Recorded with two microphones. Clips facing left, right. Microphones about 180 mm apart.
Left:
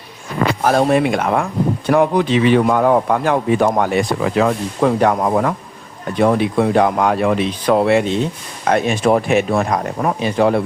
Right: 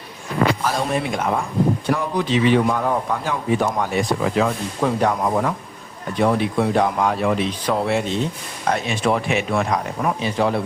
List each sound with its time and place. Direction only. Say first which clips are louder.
0.6 s speech: left 8 dB; 55° left (ahead or behind)
8.7 s speech: left 7 dB; 50° left (ahead or behind)